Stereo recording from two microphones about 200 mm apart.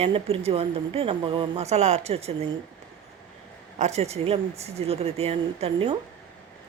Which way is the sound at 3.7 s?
35° right (ahead or behind).